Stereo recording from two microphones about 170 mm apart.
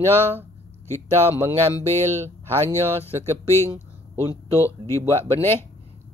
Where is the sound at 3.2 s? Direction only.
15° left (ahead or behind).